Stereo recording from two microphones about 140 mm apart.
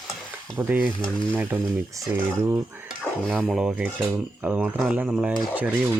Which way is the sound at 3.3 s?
5° right (ahead or behind).